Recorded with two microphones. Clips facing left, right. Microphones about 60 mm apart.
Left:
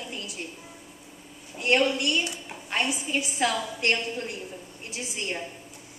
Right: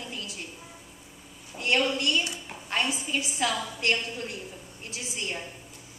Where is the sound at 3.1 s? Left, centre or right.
Centre.